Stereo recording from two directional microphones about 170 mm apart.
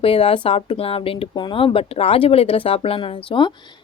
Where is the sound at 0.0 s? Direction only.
35° left (ahead or behind).